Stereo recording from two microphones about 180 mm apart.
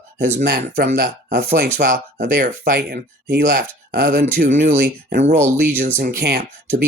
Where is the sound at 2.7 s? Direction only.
65° right (ahead or behind).